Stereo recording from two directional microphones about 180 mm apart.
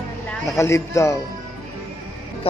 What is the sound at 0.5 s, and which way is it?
Speech, 15° left (ahead or behind).